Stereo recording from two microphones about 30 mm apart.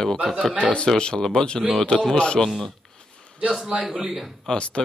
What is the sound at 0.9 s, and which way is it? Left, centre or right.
Speech, left.